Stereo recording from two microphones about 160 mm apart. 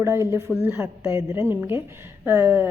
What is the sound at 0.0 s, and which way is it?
A woman's voice, 15° right (ahead or behind).